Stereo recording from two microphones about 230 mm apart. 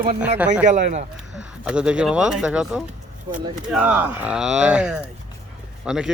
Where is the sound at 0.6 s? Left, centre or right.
Right.